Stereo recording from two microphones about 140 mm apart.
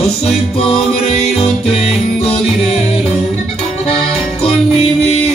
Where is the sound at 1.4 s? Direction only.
45° left (ahead or behind).